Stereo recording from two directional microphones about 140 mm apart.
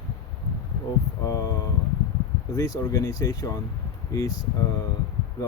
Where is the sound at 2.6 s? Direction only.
25° left (ahead or behind).